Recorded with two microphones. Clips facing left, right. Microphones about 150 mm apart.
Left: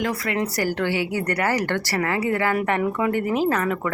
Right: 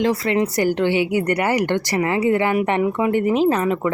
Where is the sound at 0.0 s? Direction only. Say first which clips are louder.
Right 6 dB; 25° right (ahead or behind).